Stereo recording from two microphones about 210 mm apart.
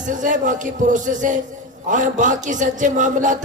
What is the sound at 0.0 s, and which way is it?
Music, 40° right (ahead or behind).